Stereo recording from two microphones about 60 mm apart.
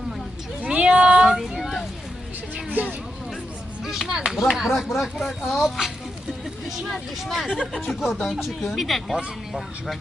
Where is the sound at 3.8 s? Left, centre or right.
Centre.